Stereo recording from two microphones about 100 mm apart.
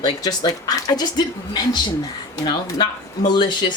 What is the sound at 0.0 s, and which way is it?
Speech, 45° left (ahead or behind).